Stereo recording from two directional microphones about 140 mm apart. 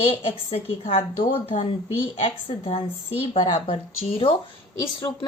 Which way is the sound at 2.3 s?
45° left (ahead or behind).